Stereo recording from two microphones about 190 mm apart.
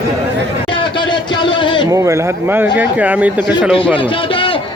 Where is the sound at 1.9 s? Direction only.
15° right (ahead or behind).